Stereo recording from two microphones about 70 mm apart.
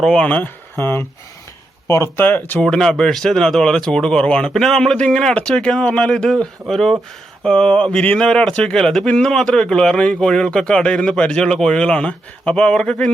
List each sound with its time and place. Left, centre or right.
0.0 s a man's voice: centre
0.3 s speech: left
0.8 s speech: left
2.1 s speech: left
2.6 s a man's voice: centre